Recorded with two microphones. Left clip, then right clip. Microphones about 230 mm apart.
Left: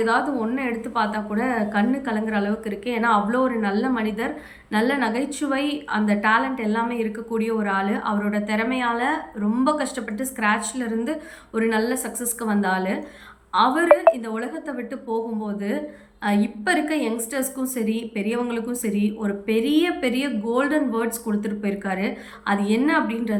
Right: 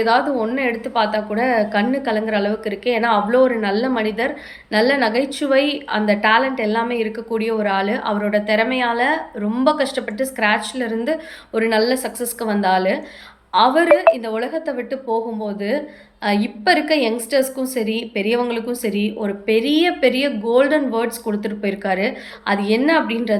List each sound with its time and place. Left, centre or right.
0.0 s a woman's voice: centre